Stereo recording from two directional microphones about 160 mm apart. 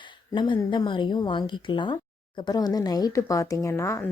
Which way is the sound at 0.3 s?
30° left (ahead or behind).